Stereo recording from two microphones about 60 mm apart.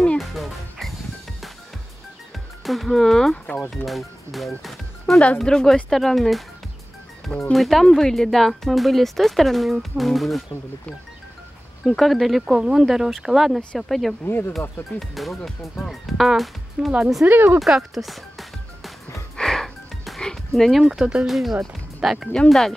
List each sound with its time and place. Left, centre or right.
0.2 s music: centre
2.6 s speech: centre
7.5 s speech: centre
11.8 s speech: centre
14.2 s speech: left
15.0 s speech: centre
19.3 s music: centre
21.0 s speech: centre
21.3 s speech: centre
22.5 s speech: centre